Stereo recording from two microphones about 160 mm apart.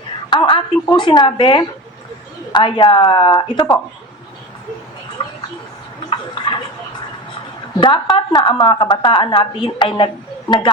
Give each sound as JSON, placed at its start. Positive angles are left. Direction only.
{"t": 0.3, "sound": "a woman's voice", "side_deg": 30}
{"t": 5.2, "sound": "a sound", "side_deg": 30}
{"t": 7.8, "sound": "a woman's voice", "side_deg": 30}